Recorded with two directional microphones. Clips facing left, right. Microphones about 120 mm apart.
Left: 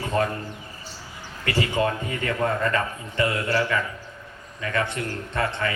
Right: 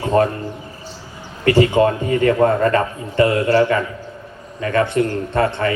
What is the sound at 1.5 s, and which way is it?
A man's voice, 40° right (ahead or behind).